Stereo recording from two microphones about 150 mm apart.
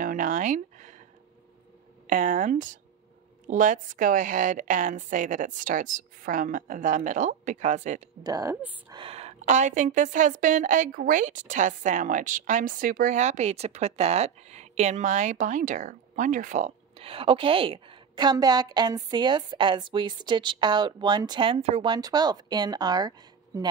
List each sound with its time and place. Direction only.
0.0 s a sound: 60° right (ahead or behind)
2.0 s a woman's voice: 60° right (ahead or behind)
8.2 s a woman's voice: 25° right (ahead or behind); by 21.8 s 45° right (ahead or behind)
21.8 s speech: 25° right (ahead or behind)